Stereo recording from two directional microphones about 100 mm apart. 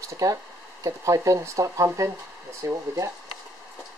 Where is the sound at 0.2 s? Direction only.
35° right (ahead or behind).